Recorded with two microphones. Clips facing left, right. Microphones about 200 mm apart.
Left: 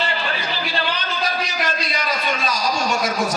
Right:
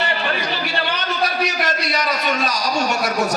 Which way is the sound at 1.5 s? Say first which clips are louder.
Right 3 dB; 70° right (ahead or behind).